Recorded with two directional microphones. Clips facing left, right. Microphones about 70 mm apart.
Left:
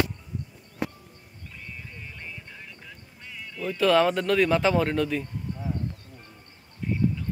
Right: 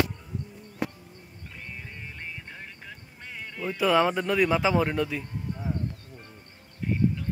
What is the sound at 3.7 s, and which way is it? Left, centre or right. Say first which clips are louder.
Speech: left 2 dB; centre.